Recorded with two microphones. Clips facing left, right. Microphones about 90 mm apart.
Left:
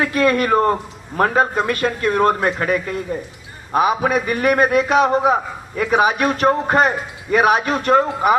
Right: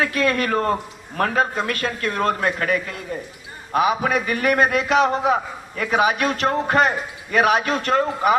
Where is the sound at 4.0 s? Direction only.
25° left (ahead or behind).